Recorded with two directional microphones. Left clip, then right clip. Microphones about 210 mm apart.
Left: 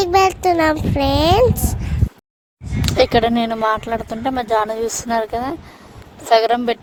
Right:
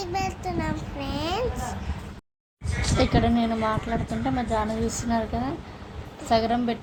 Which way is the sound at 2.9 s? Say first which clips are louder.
Left 9 dB; 50° left (ahead or behind).